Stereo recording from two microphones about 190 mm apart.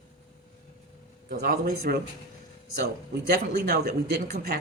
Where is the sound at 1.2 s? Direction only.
50° right (ahead or behind).